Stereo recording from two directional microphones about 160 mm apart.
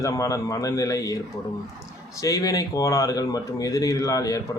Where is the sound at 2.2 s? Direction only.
20° left (ahead or behind).